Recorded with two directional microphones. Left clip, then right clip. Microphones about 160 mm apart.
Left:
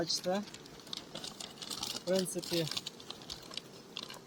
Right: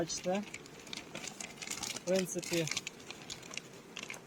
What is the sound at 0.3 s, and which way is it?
Speech, 15° right (ahead or behind).